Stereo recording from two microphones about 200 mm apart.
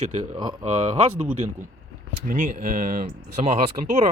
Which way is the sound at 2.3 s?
40° right (ahead or behind).